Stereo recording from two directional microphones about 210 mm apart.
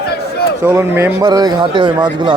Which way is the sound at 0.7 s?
10° right (ahead or behind).